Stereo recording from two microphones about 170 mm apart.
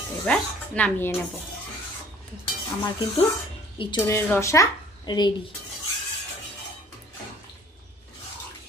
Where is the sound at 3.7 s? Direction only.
30° left (ahead or behind).